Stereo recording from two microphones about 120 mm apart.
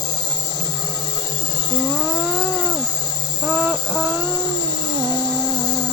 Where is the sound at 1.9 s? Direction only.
Centre (ahead or behind).